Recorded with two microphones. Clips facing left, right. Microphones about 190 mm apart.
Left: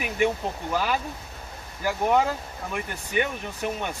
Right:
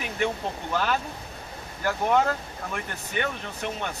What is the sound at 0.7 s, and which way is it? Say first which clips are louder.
Speech: even; 10° left (ahead or behind).